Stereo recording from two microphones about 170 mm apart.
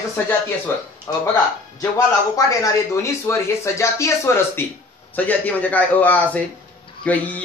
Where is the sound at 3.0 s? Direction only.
15° left (ahead or behind).